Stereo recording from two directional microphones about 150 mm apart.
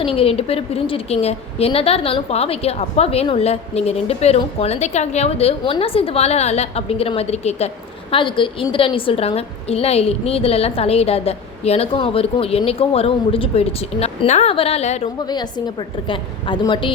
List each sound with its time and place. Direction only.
0.0 s a woman's voice: 40° left (ahead or behind)
15.3 s a woman's voice: 30° left (ahead or behind)